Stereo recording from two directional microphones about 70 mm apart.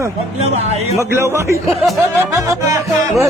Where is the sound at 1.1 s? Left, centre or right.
Right.